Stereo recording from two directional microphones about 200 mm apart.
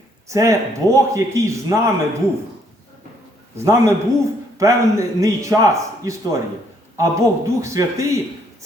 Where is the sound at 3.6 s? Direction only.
15° right (ahead or behind).